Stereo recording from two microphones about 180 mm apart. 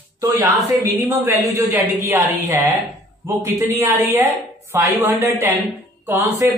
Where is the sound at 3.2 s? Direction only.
15° right (ahead or behind).